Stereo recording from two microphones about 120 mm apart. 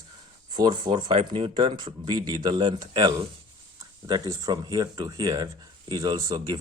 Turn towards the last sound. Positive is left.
turn(degrees=-35)  # may be behind; listen again after turning